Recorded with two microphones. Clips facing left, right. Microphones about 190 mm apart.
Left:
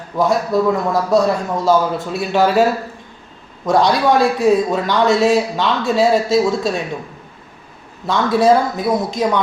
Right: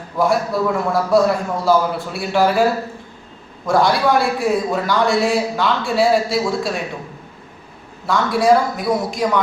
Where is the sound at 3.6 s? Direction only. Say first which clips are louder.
Left 2 dB; 20° left (ahead or behind).